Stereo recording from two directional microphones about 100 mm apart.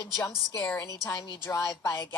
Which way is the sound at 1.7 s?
40° left (ahead or behind).